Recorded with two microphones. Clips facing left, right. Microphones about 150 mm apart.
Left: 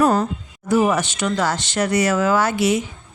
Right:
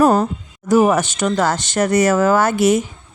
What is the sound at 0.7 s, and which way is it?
Speech, 45° right (ahead or behind).